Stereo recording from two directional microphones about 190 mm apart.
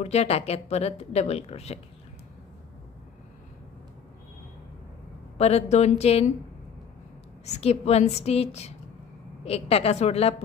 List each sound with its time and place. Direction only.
0.0 s speech: 35° left (ahead or behind)
5.4 s speech: 35° left (ahead or behind)
7.4 s speech: 35° left (ahead or behind)